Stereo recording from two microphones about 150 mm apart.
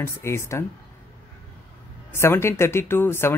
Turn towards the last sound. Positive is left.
turn(degrees=15)  # may be behind; listen again after turning